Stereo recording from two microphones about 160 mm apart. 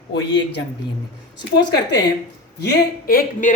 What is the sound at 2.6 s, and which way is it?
Speech, 80° left.